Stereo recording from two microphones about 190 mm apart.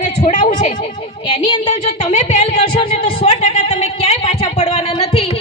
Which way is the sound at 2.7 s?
30° left (ahead or behind).